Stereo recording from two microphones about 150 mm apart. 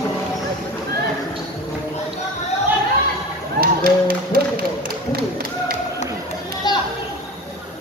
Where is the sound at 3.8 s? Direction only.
70° right (ahead or behind).